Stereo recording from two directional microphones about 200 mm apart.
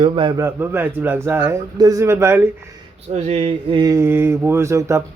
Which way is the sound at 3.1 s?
30° right (ahead or behind).